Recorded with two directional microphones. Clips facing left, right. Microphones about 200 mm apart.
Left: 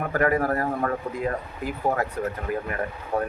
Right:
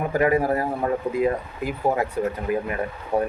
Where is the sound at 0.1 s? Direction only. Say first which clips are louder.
Right 2 dB; 15° right (ahead or behind).